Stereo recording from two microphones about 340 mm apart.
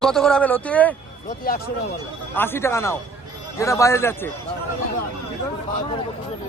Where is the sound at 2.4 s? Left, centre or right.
Centre.